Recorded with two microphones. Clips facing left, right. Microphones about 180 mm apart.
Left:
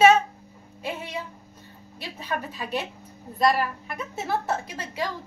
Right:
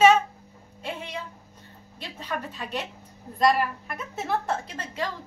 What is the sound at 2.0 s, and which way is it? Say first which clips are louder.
A woman's voice: left 2 dB; 10° left (ahead or behind).